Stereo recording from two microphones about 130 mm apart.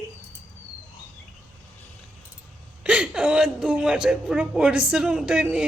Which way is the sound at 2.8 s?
10° right (ahead or behind).